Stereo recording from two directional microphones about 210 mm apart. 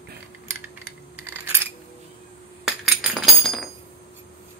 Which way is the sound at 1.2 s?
10° right (ahead or behind).